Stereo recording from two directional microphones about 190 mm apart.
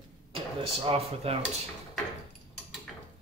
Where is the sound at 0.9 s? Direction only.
30° right (ahead or behind).